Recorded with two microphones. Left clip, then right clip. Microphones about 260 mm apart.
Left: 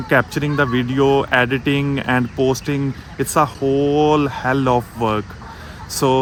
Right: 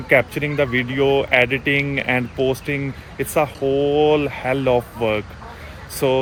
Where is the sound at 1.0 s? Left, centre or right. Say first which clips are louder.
Left 1 dB; left.